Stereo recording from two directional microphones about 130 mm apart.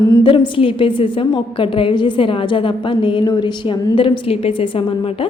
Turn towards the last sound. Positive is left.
turn(degrees=45)  # may be behind; listen again after turning